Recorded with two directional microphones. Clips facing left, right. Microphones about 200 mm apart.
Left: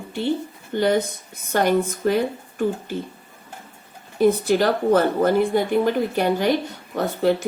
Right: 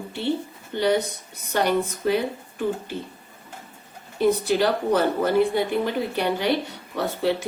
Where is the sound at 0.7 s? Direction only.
45° left (ahead or behind).